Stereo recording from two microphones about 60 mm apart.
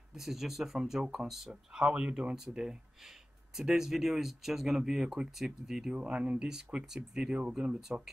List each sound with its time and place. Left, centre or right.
0.1 s speech: centre
1.5 s speech: centre
5.9 s speech: centre